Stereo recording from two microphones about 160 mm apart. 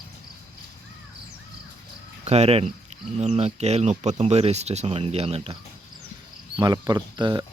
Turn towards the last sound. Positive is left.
turn(degrees=-30)  # may be behind; listen again after turning